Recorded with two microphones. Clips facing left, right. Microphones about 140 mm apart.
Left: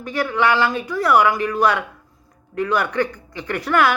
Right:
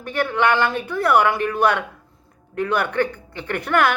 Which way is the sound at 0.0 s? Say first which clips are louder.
Even; 55° right (ahead or behind).